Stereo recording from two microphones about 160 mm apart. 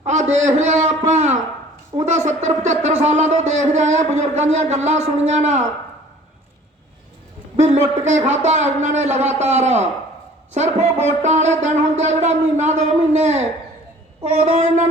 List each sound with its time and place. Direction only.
0.0 s a man's voice: 45° right (ahead or behind)
7.5 s speech: 45° right (ahead or behind)